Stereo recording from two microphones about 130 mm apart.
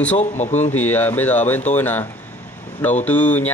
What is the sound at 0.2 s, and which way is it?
Speech, 60° left (ahead or behind).